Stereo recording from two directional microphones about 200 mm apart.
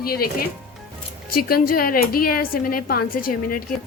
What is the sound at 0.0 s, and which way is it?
Speech, 50° left (ahead or behind).